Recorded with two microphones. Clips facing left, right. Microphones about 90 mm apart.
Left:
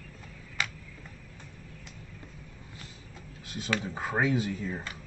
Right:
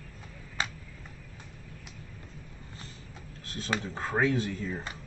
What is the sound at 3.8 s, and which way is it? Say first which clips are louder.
Speech: right 2 dB; 5° left (ahead or behind).